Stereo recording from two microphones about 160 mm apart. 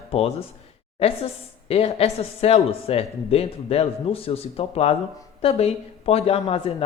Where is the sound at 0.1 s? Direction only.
40° left (ahead or behind).